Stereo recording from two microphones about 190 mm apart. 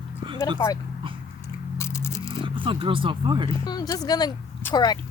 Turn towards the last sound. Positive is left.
turn(degrees=20)  # may be behind; listen again after turning